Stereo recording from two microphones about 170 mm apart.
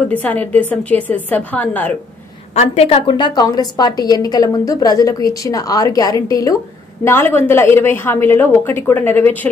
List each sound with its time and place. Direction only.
0.1 s a woman's voice: 10° left (ahead or behind)
2.5 s a woman's voice: 40° left (ahead or behind); by 9.5 s 10° left (ahead or behind)